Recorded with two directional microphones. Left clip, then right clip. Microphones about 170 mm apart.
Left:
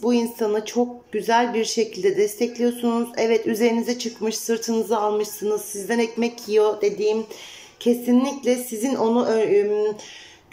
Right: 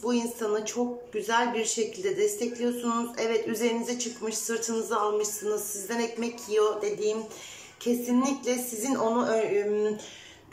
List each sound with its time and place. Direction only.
0.0 s speech: 25° left (ahead or behind)